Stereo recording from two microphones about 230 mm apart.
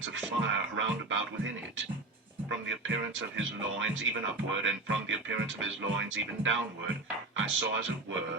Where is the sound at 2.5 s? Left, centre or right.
Right.